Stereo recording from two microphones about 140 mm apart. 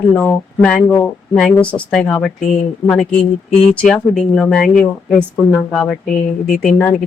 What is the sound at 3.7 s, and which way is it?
Speech, 10° left (ahead or behind).